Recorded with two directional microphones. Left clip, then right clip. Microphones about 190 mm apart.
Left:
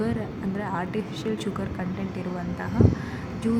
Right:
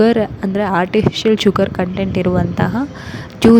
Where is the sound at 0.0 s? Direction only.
45° right (ahead or behind).